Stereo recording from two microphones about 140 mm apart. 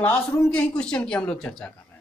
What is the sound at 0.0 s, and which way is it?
Speech, 10° left (ahead or behind).